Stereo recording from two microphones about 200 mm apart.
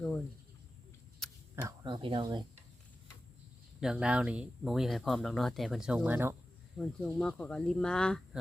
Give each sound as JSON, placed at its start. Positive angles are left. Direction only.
{"t": 1.2, "sound": "camera", "side_deg": 0}
{"t": 1.6, "sound": "speech", "side_deg": -25}
{"t": 3.8, "sound": "speech", "side_deg": -5}
{"t": 6.7, "sound": "speech", "side_deg": 5}